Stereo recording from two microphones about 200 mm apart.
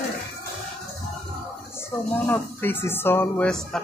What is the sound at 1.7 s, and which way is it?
Speech, 10° left (ahead or behind).